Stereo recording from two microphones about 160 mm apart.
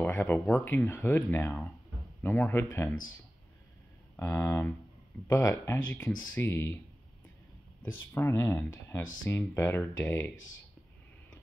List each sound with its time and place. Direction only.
0.0 s speech: 10° left (ahead or behind)
4.2 s speech: 15° left (ahead or behind)
7.8 s speech: 10° left (ahead or behind)